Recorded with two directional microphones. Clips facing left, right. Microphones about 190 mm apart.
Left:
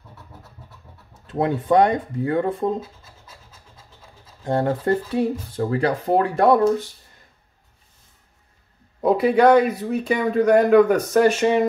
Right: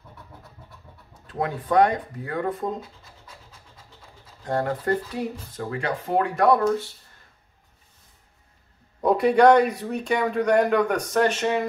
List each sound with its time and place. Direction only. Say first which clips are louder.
1.2 s speech: left 6 dB; 25° left (ahead or behind)
4.5 s speech: left 4 dB; 25° left (ahead or behind)
9.0 s speech: left 1 dB; 5° left (ahead or behind)